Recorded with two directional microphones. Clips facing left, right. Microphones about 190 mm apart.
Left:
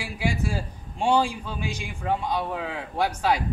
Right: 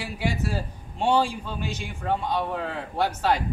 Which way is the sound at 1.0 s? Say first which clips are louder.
Even; centre (ahead or behind).